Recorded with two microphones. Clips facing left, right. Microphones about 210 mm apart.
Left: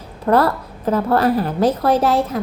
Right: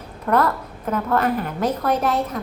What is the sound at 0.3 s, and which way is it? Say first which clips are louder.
A woman's voice: left 4 dB; 30° left (ahead or behind).